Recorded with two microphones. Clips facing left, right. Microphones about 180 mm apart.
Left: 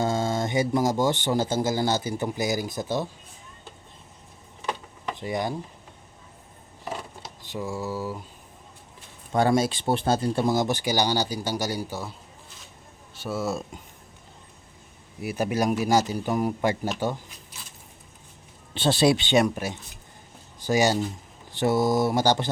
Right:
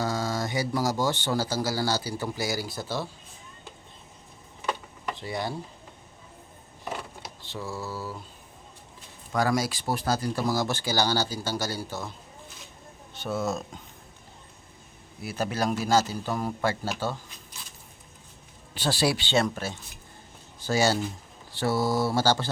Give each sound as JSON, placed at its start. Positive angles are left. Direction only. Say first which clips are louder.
{"t": 0.0, "sound": "speech", "louder": "left 4 dB", "side_deg": 25}
{"t": 5.1, "sound": "speech", "louder": "left 4 dB", "side_deg": 20}
{"t": 7.5, "sound": "speech", "louder": "left 4 dB", "side_deg": 15}
{"t": 9.3, "sound": "speech", "louder": "left 4 dB", "side_deg": 25}
{"t": 13.1, "sound": "speech", "louder": "left 1 dB", "side_deg": 5}
{"t": 15.2, "sound": "speech", "louder": "left 3 dB", "side_deg": 15}
{"t": 18.7, "sound": "speech", "louder": "left 5 dB", "side_deg": 25}